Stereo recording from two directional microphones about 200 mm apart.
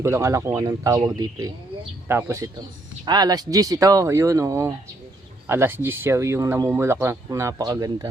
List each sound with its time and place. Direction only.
0.0 s speech: 15° right (ahead or behind)